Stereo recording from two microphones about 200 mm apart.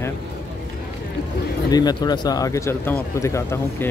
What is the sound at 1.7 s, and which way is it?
Speech, 20° left (ahead or behind).